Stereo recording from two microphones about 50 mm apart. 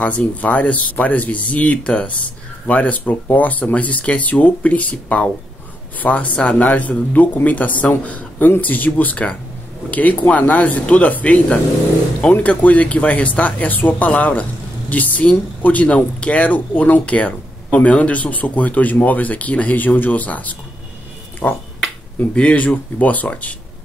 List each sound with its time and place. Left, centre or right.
0.0 s speech: left
22.9 s speech: left